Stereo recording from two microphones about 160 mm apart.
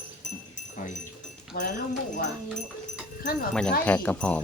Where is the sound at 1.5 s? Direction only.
70° left (ahead or behind).